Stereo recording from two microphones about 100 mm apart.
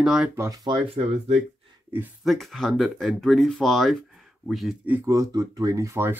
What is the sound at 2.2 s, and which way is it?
Speech, centre (ahead or behind).